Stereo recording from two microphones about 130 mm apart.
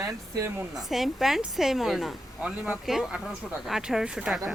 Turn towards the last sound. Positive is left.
turn(degrees=0)  # may be behind; listen again after turning